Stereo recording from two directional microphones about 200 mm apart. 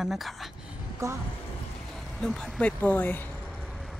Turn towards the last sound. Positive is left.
turn(degrees=0)  # may be behind; listen again after turning